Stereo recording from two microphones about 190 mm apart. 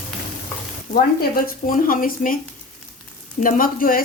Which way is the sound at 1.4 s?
45° left (ahead or behind).